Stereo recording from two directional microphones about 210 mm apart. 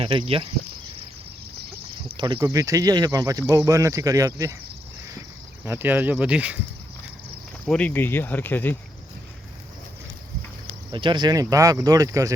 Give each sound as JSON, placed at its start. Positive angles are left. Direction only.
{"t": 0.0, "sound": "speech", "side_deg": -25}
{"t": 2.0, "sound": "speech", "side_deg": -20}
{"t": 5.6, "sound": "speech", "side_deg": -10}
{"t": 7.7, "sound": "speech", "side_deg": 5}
{"t": 10.9, "sound": "speech", "side_deg": -20}